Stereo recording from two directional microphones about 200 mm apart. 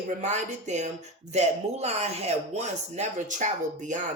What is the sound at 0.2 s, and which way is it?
Speech, 35° right (ahead or behind).